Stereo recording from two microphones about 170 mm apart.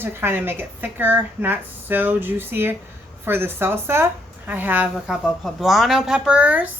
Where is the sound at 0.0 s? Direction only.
15° right (ahead or behind).